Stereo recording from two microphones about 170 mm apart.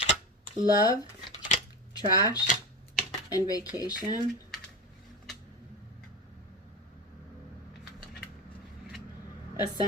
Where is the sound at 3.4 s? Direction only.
20° left (ahead or behind).